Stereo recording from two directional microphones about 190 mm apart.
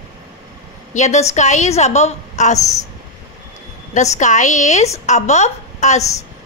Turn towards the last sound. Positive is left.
turn(degrees=35)  # may be behind; listen again after turning